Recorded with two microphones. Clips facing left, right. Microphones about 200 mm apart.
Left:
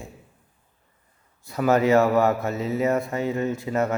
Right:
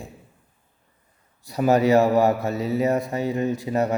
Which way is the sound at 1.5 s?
15° right (ahead or behind).